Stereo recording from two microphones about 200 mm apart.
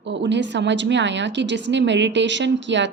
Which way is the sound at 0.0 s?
60° right (ahead or behind).